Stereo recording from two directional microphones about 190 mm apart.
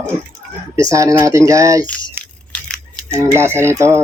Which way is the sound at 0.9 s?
15° right (ahead or behind).